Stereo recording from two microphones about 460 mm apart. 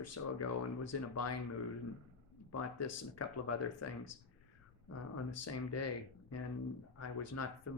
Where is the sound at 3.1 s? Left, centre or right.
Left.